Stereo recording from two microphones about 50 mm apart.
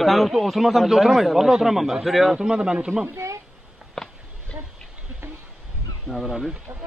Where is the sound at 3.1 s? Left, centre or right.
Right.